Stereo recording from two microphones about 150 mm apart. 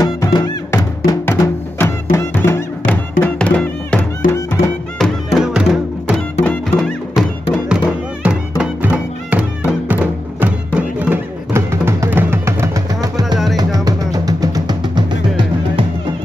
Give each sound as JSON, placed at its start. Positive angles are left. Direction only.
{"t": 0.0, "sound": "music", "side_deg": 25}
{"t": 1.2, "sound": "music", "side_deg": 15}
{"t": 4.9, "sound": "music", "side_deg": 0}
{"t": 7.7, "sound": "music", "side_deg": -5}